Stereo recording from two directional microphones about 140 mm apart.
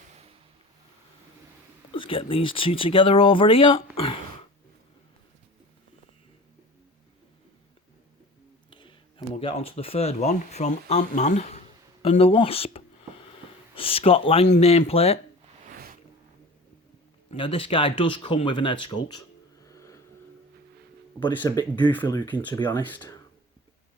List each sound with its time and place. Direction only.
1.9 s speech: 35° left (ahead or behind)
8.7 s speech: 35° left (ahead or behind); by 11.6 s 55° left (ahead or behind)
12.2 s speech: 40° left (ahead or behind)
17.3 s speech: 40° left (ahead or behind); by 20.0 s 20° left (ahead or behind)
21.2 s speech: 30° left (ahead or behind)
21.8 s speech: 10° left (ahead or behind)
22.5 s speech: 30° left (ahead or behind)